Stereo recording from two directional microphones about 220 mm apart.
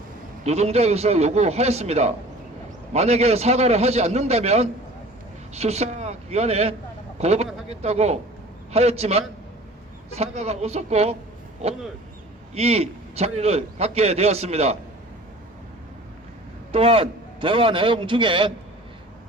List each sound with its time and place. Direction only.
0.4 s a man's voice: 30° right (ahead or behind)
12.5 s a man's voice: 30° right (ahead or behind)
16.7 s a man's voice: 25° right (ahead or behind)